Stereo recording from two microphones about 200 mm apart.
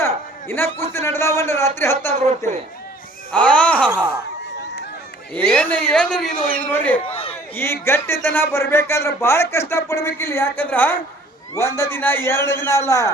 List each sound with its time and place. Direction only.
0.0 s a man's voice: 10° left (ahead or behind)
3.3 s wail: 5° left (ahead or behind)
3.8 s speech: 10° right (ahead or behind)
5.3 s wail: 5° left (ahead or behind)
6.7 s a man's voice: 10° left (ahead or behind)
7.1 s a sound: 30° left (ahead or behind)
7.5 s a man's voice: 10° left (ahead or behind)